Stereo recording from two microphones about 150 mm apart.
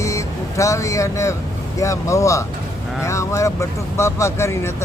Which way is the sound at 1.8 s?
20° left (ahead or behind).